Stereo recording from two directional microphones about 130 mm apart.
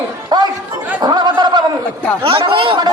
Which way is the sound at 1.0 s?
30° right (ahead or behind).